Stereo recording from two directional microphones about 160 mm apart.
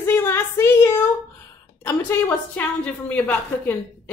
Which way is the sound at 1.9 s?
10° left (ahead or behind).